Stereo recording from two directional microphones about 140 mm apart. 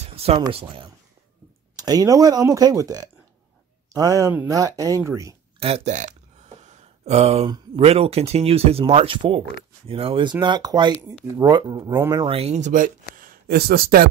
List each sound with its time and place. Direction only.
0.0 s a sound: 45° right (ahead or behind)
0.5 s speech: 40° right (ahead or behind)
1.8 s speech: 25° right (ahead or behind)
5.6 s speech: 45° right (ahead or behind)
6.6 s a sound: 55° right (ahead or behind)
7.4 s speech: 30° right (ahead or behind)
7.8 s speech: 45° right (ahead or behind); by 12.3 s 25° right (ahead or behind)
12.3 s speech: 45° right (ahead or behind); by 12.9 s 65° right (ahead or behind)
13.1 s speech: 90° right